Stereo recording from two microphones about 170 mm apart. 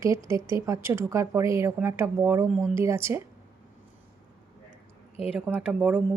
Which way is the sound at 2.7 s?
15° right (ahead or behind).